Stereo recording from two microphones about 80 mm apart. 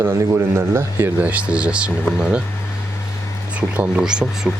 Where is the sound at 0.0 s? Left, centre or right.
Right.